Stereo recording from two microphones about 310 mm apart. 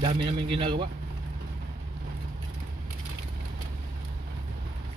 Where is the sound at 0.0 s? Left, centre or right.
Centre.